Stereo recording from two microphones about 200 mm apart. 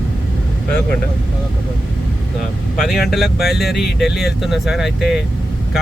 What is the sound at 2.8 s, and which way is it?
Speech, centre (ahead or behind).